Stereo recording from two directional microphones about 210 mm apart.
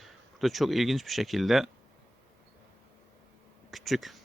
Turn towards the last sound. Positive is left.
turn(degrees=0)  # may be behind; listen again after turning